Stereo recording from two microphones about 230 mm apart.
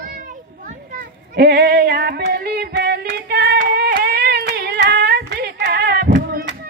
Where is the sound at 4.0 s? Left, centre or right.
Right.